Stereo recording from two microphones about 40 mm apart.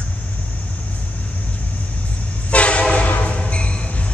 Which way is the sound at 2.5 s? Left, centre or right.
Left.